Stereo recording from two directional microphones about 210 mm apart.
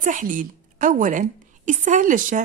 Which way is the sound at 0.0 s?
40° right (ahead or behind).